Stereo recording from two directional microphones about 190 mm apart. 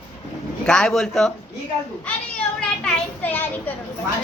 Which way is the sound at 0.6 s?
5° left (ahead or behind).